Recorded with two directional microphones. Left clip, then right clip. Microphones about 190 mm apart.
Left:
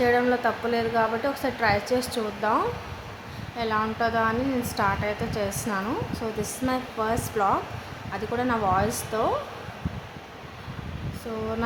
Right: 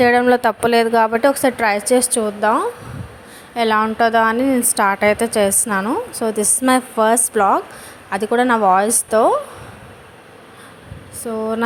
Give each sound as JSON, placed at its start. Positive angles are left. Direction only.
{"t": 0.0, "sound": "a woman's voice", "side_deg": -50}
{"t": 3.6, "sound": "a woman's voice", "side_deg": -45}